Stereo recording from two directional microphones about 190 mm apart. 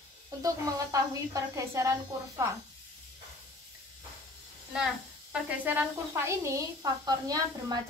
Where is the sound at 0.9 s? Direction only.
15° right (ahead or behind).